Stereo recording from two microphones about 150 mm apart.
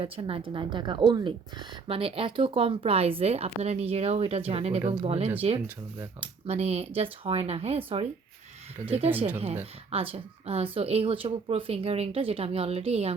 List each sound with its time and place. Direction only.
0.0 s a woman's voice: 35° right (ahead or behind)
8.8 s speech: 10° right (ahead or behind)
9.2 s a woman's voice: 45° right (ahead or behind)